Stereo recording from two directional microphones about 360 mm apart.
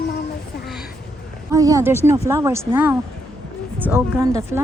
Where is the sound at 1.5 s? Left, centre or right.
Centre.